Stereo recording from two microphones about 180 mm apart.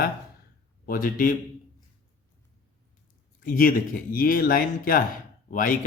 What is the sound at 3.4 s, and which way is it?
Speech, 50° left (ahead or behind).